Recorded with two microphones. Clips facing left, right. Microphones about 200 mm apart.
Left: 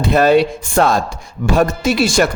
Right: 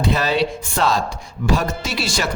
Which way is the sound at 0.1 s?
50° left (ahead or behind).